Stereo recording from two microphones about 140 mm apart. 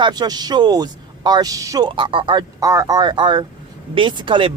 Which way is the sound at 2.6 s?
25° right (ahead or behind).